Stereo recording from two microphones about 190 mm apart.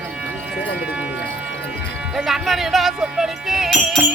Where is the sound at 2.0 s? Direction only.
5° right (ahead or behind).